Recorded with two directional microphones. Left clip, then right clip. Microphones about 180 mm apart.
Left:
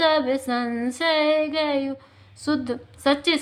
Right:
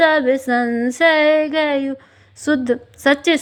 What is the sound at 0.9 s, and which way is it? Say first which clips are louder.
A woman's voice: right 7 dB; 35° right (ahead or behind).